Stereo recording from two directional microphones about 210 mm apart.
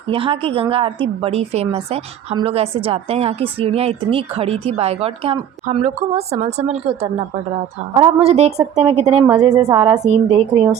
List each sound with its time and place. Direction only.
0.1 s a woman's voice: 25° right (ahead or behind)
9.2 s a woman's voice: 15° right (ahead or behind); by 10.4 s 30° right (ahead or behind)